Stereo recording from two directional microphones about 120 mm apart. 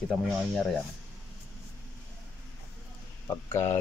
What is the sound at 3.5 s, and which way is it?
Speech, 20° left (ahead or behind).